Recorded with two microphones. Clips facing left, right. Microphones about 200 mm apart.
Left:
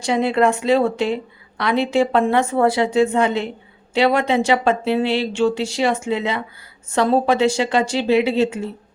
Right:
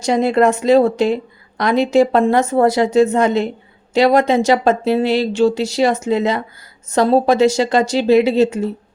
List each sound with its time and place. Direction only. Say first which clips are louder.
0.0 s a woman's voice: right 3 dB; 40° right (ahead or behind)